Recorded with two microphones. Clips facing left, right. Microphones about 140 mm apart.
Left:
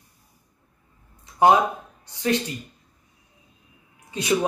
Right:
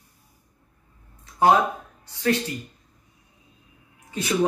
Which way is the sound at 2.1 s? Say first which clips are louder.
Right 1 dB; 20° left (ahead or behind).